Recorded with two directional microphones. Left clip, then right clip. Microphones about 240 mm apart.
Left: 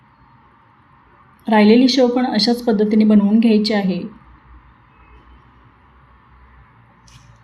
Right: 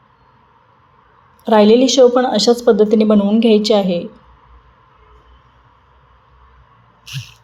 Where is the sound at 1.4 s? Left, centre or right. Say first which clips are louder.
Right 3 dB; right.